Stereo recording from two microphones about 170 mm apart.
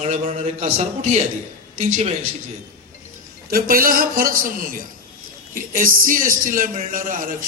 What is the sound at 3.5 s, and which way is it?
A man's voice, 55° right (ahead or behind).